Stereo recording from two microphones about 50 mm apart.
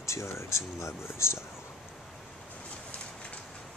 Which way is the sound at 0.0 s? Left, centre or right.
Left.